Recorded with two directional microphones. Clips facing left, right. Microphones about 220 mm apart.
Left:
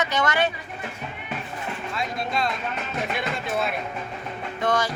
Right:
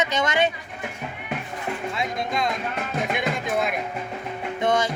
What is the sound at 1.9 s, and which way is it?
Speech, 15° right (ahead or behind).